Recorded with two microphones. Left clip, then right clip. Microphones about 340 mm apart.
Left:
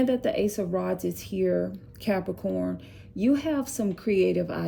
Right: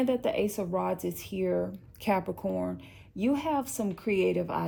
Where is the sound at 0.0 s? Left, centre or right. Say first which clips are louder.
Left 3 dB; centre.